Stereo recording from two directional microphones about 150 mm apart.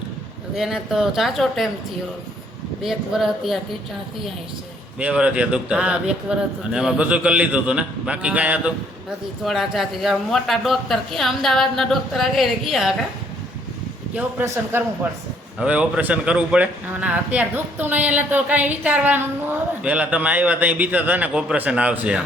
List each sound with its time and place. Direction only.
0.5 s speech: 5° right (ahead or behind)
2.8 s speech: centre (ahead or behind)
4.9 s speech: 10° right (ahead or behind)
14.2 s speech: 15° right (ahead or behind)